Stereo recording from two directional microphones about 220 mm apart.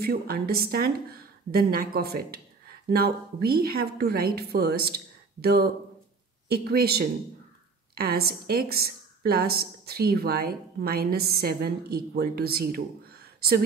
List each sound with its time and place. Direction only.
0.0 s a woman's voice: 45° right (ahead or behind)